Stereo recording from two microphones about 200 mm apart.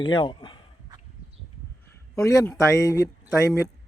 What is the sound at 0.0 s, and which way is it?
Speech, 25° left (ahead or behind).